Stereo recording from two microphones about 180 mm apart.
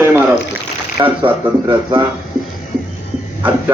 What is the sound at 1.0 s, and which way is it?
Speech, 25° right (ahead or behind).